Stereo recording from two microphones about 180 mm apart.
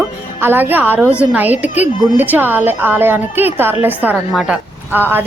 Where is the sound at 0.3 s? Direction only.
10° right (ahead or behind).